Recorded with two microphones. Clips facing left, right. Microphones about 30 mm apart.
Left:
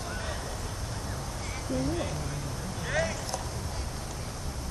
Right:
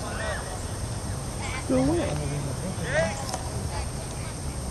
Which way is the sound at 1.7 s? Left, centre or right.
Right.